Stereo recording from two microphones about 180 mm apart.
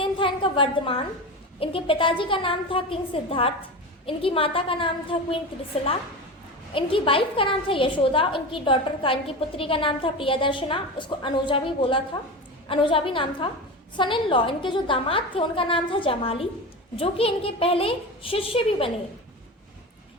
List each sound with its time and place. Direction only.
0.0 s a sound: 30° left (ahead or behind)
1.5 s a woman's voice: 30° left (ahead or behind)
6.7 s a woman's voice: 30° left (ahead or behind)